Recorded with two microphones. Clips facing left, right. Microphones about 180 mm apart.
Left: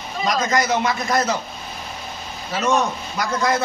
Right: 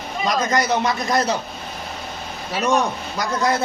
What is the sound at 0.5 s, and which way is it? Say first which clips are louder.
Speech: even; 30° right (ahead or behind).